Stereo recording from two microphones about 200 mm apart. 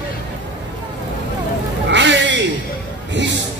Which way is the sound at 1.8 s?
65° right (ahead or behind).